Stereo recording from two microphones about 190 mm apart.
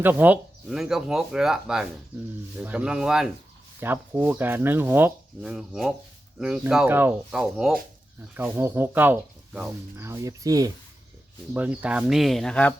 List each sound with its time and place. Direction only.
0.0 s speech: 10° right (ahead or behind)
11.5 s speech: 10° right (ahead or behind)